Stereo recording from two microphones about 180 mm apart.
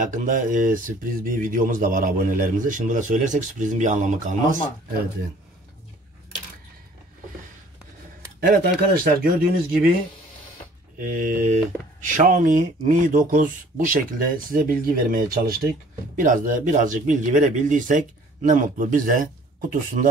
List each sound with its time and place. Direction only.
0.0 s speech: 45° right (ahead or behind)
8.4 s speech: 55° right (ahead or behind)
11.0 s speech: 45° right (ahead or behind)